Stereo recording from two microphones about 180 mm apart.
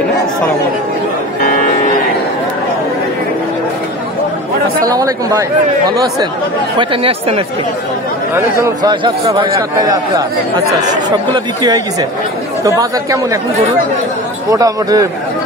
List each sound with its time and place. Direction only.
1.4 s music: 40° left (ahead or behind)
4.8 s speech: 20° right (ahead or behind)
6.8 s speech: 30° right (ahead or behind)
8.5 s speech: 20° right (ahead or behind)
14.5 s speech: 20° right (ahead or behind)